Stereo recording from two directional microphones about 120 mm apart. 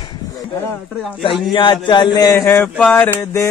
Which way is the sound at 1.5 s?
45° left (ahead or behind).